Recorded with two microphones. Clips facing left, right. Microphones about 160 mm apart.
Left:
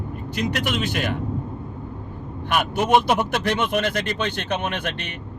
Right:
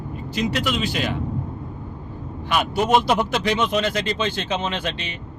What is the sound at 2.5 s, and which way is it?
Speech, 55° left (ahead or behind).